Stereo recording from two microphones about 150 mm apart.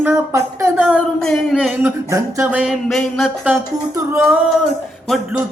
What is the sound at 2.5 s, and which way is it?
Music, 5° right (ahead or behind).